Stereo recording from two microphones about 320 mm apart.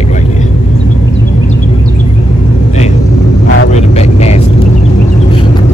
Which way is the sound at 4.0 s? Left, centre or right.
Centre.